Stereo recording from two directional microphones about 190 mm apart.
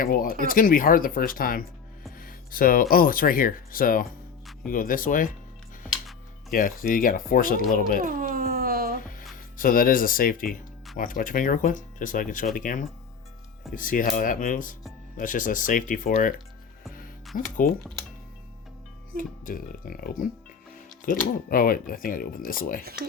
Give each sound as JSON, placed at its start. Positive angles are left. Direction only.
{"t": 0.0, "sound": "speech", "side_deg": 50}
{"t": 2.1, "sound": "music", "side_deg": 50}
{"t": 2.9, "sound": "speech", "side_deg": 50}
{"t": 6.5, "sound": "speech", "side_deg": 45}
{"t": 8.0, "sound": "a sound", "side_deg": -45}
{"t": 9.0, "sound": "music", "side_deg": 45}
{"t": 9.3, "sound": "speech", "side_deg": 45}
{"t": 17.3, "sound": "speech", "side_deg": 45}
{"t": 19.1, "sound": "speech", "side_deg": 50}
{"t": 22.8, "sound": "speech", "side_deg": -55}